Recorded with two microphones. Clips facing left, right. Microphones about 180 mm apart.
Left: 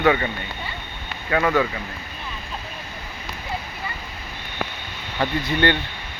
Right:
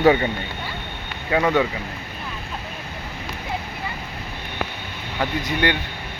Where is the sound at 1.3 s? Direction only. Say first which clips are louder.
Right 1 dB; 20° right (ahead or behind).